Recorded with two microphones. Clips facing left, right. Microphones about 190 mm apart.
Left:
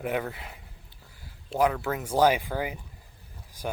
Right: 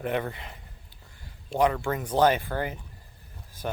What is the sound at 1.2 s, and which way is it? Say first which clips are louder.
Speech: right 1 dB; 5° left (ahead or behind).